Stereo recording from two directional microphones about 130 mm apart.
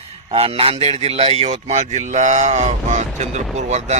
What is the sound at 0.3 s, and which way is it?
Speech, 50° right (ahead or behind).